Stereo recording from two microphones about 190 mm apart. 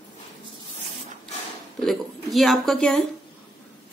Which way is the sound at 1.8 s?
Centre (ahead or behind).